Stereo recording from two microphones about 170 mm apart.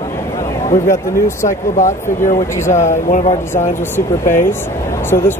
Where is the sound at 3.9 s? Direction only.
15° left (ahead or behind).